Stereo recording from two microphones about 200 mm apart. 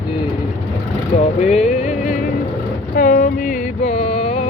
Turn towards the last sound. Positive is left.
turn(degrees=30)  # may be behind; listen again after turning